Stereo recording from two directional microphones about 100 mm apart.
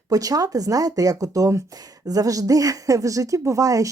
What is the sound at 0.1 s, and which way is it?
Speech, 35° right (ahead or behind).